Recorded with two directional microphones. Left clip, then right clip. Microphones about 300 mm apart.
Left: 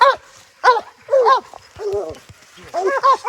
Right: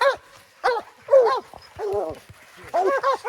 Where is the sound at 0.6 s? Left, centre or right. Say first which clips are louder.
Left 9 dB; centre.